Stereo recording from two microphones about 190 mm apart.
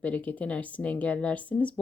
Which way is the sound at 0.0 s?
10° left (ahead or behind).